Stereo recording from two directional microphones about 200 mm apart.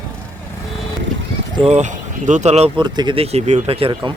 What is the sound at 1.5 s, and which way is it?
Speech, 30° right (ahead or behind).